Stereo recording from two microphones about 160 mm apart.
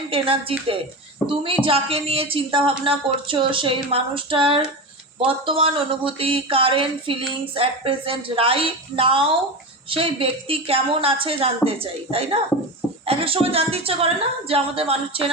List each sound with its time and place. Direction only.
0.1 s speech: 35° right (ahead or behind)